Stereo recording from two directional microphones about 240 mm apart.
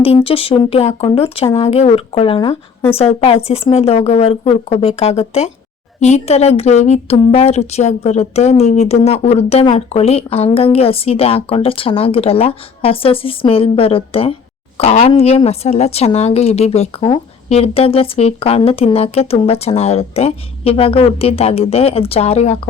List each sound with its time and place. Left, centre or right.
0.0 s a woman's voice: left